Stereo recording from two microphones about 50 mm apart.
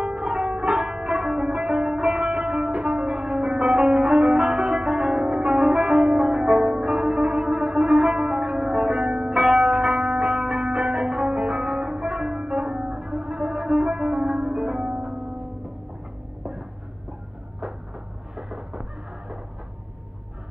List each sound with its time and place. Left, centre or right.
0.1 s music: centre
1.6 s music: centre
7.5 s zither: centre
9.8 s music: centre
11.5 s music: centre
18.3 s a sound: centre